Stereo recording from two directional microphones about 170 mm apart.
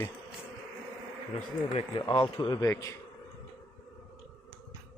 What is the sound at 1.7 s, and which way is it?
Speech, 30° left (ahead or behind).